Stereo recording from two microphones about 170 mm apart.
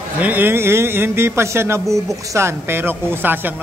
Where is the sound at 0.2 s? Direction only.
10° right (ahead or behind).